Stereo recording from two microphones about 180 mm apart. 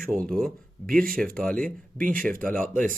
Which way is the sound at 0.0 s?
5° left (ahead or behind).